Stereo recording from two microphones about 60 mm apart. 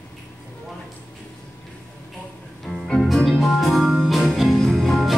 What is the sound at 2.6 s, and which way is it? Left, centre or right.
Music, centre.